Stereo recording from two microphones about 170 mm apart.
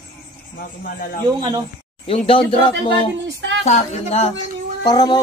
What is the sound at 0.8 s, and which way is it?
Speech, 55° left (ahead or behind).